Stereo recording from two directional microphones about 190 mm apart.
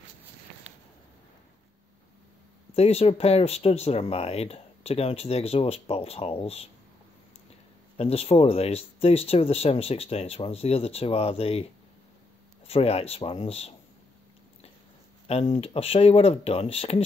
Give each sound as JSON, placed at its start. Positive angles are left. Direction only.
{"t": 2.7, "sound": "speech", "side_deg": 35}
{"t": 8.0, "sound": "speech", "side_deg": 30}
{"t": 12.6, "sound": "speech", "side_deg": 30}
{"t": 15.2, "sound": "speech", "side_deg": 35}